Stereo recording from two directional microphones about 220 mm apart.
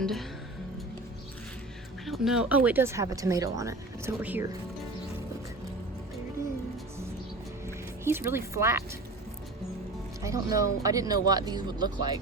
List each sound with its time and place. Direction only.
0.0 s speech: centre (ahead or behind)
2.0 s speech: centre (ahead or behind)
8.0 s speech: 10° right (ahead or behind)
10.2 s speech: 15° right (ahead or behind)